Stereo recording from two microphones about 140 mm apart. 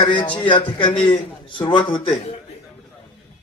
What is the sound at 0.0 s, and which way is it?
A man's voice, 35° left (ahead or behind).